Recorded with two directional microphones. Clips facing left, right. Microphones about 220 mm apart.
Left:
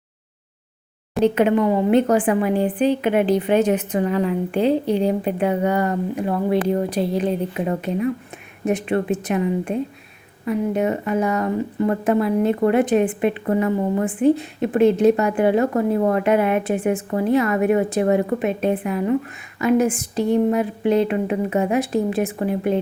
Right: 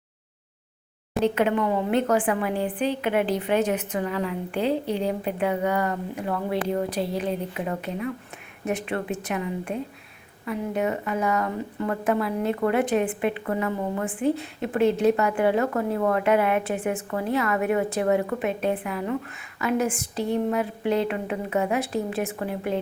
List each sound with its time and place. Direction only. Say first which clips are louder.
1.2 s speech: left 6 dB; 20° left (ahead or behind)